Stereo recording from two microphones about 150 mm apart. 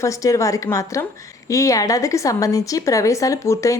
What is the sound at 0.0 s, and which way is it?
A woman's voice, 20° left (ahead or behind).